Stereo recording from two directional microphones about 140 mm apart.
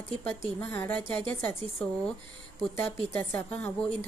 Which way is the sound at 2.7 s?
15° left (ahead or behind).